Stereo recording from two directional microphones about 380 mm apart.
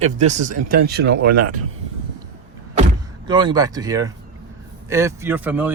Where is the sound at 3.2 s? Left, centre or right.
Centre.